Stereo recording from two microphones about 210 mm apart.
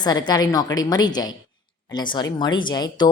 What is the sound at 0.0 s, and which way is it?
A woman's voice, 20° left (ahead or behind).